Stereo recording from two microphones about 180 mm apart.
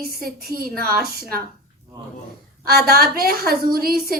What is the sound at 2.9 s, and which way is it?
A woman's voice, 55° right (ahead or behind).